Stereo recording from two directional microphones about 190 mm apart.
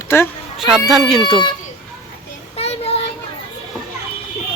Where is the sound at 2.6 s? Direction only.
30° left (ahead or behind).